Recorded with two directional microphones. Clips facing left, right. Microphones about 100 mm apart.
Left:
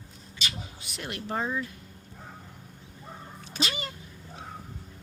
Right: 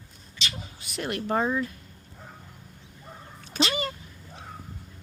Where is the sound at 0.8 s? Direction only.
50° right (ahead or behind); by 1.6 s 65° right (ahead or behind).